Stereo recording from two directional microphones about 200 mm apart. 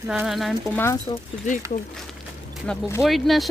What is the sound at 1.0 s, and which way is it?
Speech, 35° left (ahead or behind).